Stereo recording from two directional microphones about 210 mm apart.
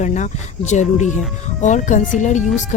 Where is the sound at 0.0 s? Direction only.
35° left (ahead or behind).